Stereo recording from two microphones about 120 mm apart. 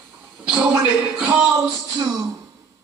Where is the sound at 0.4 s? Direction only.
10° right (ahead or behind).